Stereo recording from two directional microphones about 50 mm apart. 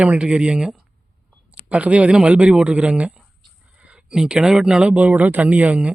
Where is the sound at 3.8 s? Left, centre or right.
Right.